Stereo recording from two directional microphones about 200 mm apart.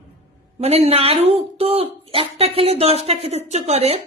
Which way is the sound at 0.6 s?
30° right (ahead or behind).